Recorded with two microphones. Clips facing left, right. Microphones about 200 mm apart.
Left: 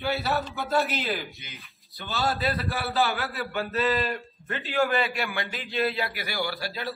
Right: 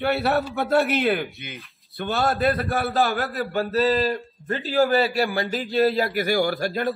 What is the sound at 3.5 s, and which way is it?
A man's voice, 35° right (ahead or behind).